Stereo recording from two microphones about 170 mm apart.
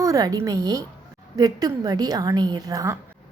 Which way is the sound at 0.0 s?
20° right (ahead or behind).